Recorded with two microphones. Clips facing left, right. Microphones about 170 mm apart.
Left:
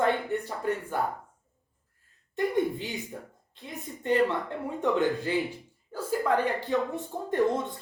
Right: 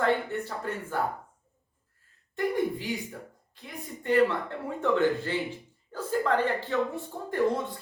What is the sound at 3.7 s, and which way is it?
A woman's voice, 20° left (ahead or behind).